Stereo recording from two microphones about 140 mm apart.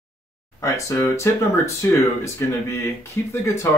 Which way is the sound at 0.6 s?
20° left (ahead or behind).